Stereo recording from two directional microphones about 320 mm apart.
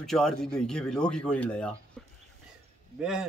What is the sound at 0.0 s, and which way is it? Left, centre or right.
Speech, centre.